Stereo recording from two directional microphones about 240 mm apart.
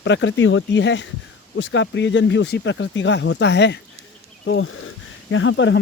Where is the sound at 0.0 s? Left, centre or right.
Left.